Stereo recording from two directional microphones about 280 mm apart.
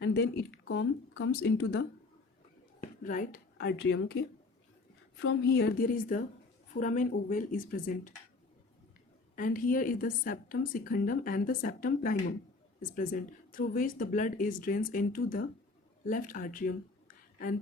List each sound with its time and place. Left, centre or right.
0.0 s a woman's voice: left
3.0 s a woman's voice: left
5.2 s a woman's voice: left
9.3 s a woman's voice: left